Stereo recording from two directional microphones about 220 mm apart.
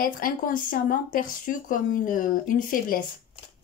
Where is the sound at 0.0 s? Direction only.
40° left (ahead or behind).